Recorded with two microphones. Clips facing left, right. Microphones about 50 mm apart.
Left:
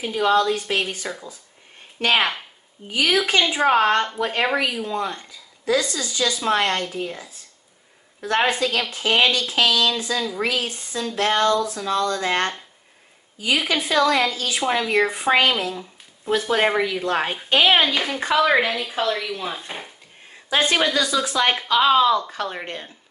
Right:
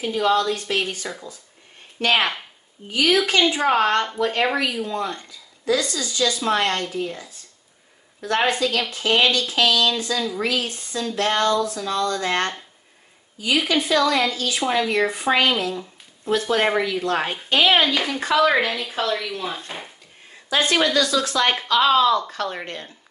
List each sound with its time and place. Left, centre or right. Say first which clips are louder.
0.0 s speech: left 1 dB; centre
2.1 s speech: left 1 dB; centre
2.9 s speech: right 1 dB; centre
13.6 s speech: right 1 dB; centre
17.8 s speech: even; centre
18.2 s speech: even; centre